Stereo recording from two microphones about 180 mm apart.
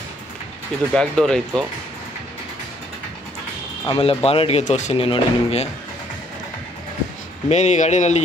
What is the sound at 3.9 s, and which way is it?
A man's voice, 30° left (ahead or behind).